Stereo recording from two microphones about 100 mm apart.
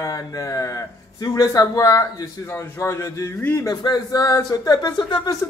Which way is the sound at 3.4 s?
20° left (ahead or behind).